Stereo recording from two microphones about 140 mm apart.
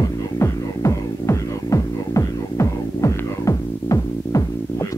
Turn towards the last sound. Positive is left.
turn(degrees=25)  # may be behind; listen again after turning